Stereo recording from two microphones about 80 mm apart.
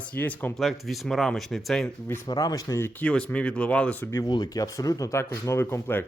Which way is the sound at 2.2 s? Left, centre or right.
Left.